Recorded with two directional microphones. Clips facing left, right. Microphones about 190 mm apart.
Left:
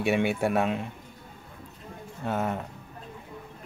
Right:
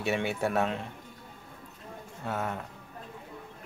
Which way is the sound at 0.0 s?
15° left (ahead or behind).